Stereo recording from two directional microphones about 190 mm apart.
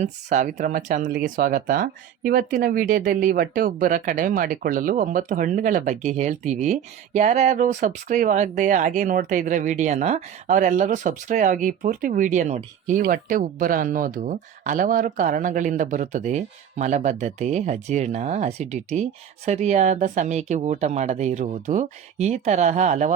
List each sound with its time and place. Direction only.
0.0 s speech: 40° right (ahead or behind)